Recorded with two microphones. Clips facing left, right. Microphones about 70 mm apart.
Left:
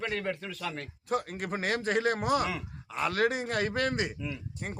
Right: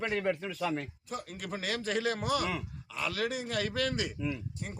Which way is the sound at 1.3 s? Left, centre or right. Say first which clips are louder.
Left 4 dB; left.